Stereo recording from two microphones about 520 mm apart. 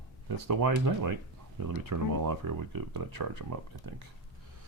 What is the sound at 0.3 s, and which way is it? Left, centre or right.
Speech, right.